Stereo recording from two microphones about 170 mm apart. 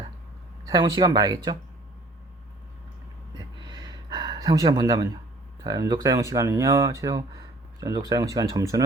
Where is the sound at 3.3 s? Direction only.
25° right (ahead or behind).